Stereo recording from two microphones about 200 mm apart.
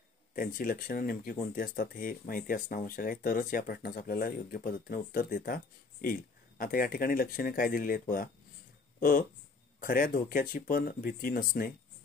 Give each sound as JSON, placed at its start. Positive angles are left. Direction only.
{"t": 0.4, "sound": "speech", "side_deg": 45}
{"t": 9.8, "sound": "speech", "side_deg": 45}